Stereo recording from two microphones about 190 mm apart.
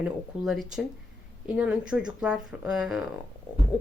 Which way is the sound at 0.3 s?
5° right (ahead or behind).